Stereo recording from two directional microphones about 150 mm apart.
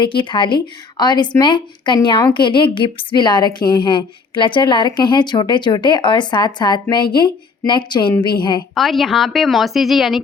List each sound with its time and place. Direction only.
0.0 s a woman's voice: 35° left (ahead or behind)
8.7 s a woman's voice: centre (ahead or behind)